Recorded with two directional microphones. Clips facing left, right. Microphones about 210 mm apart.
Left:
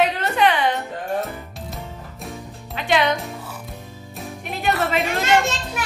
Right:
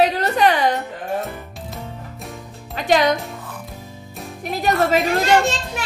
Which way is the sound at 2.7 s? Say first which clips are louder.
Right 3 dB; 40° right (ahead or behind).